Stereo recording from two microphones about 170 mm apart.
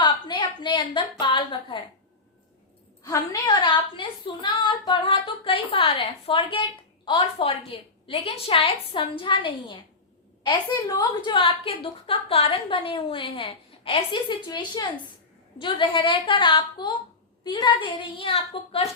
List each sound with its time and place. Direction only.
0.0 s a woman's voice: 25° left (ahead or behind)
3.0 s a woman's voice: 25° left (ahead or behind)